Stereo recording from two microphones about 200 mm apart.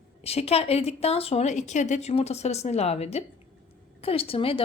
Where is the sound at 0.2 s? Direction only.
30° left (ahead or behind).